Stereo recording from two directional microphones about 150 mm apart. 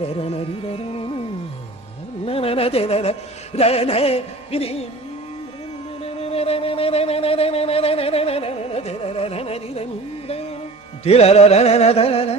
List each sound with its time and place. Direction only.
0.0 s carnatic music: 40° left (ahead or behind)
2.2 s music: 40° left (ahead or behind)
6.0 s a sound: 40° left (ahead or behind)
11.1 s music: 45° left (ahead or behind)